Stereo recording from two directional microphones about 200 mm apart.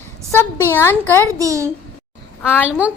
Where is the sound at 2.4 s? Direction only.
10° left (ahead or behind).